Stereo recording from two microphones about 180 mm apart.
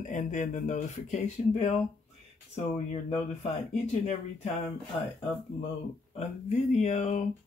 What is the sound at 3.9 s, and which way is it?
Speech, 35° left (ahead or behind).